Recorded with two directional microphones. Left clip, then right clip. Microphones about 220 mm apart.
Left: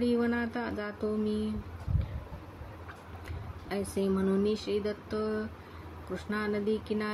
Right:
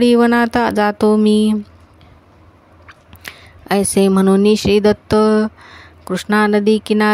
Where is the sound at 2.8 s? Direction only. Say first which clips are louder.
Right 16 dB; 50° right (ahead or behind).